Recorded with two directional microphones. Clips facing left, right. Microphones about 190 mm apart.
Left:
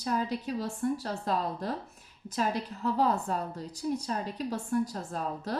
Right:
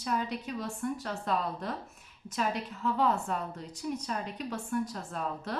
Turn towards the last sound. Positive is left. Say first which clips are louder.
# left 2 dB
turn(degrees=35)  # may be behind; listen again after turning